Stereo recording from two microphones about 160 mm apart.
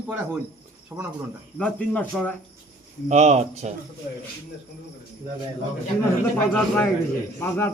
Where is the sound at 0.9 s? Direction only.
10° right (ahead or behind).